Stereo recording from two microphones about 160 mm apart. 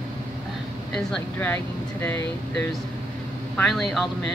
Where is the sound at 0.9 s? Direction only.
10° left (ahead or behind).